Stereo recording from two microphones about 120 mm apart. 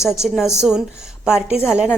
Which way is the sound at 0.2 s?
5° right (ahead or behind).